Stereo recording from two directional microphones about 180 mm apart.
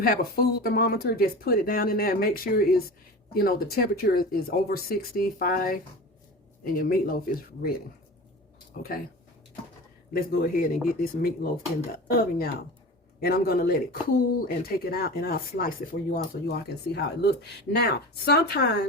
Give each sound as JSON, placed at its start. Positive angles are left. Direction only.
{"t": 0.0, "sound": "speech", "side_deg": 55}
{"t": 10.1, "sound": "speech", "side_deg": 55}
{"t": 18.3, "sound": "speech", "side_deg": 65}